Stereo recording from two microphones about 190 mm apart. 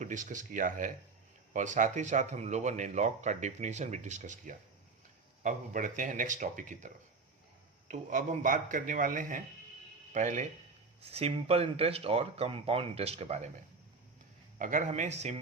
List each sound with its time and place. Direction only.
0.0 s a man's voice: 40° right (ahead or behind)
14.6 s speech: 40° right (ahead or behind)